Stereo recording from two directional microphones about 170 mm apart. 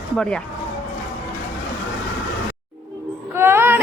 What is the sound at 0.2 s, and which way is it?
Speech, 5° left (ahead or behind).